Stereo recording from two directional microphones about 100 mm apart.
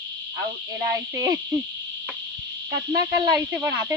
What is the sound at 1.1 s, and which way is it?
Speech, 35° right (ahead or behind).